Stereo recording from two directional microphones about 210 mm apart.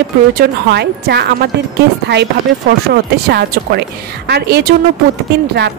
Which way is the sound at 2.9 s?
50° right (ahead or behind).